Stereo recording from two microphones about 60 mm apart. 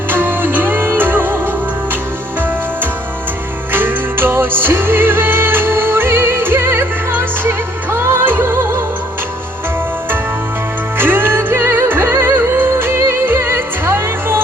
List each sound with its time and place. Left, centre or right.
0.1 s music: right
3.7 s music: right
10.9 s music: right